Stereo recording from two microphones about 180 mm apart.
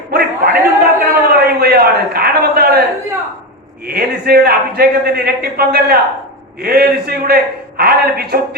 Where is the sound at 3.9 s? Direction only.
55° right (ahead or behind).